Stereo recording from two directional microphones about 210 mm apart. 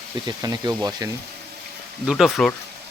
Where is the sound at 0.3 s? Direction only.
20° right (ahead or behind).